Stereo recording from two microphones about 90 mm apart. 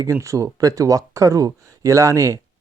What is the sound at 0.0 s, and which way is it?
Speech, 35° right (ahead or behind).